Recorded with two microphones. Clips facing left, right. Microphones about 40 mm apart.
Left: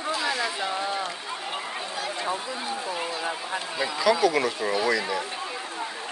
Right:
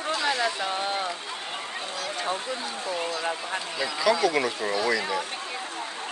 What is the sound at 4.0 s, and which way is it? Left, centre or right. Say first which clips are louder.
Speech: left 1 dB; centre.